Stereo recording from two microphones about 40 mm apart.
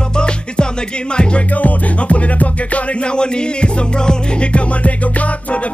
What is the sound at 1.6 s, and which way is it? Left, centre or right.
Music, left.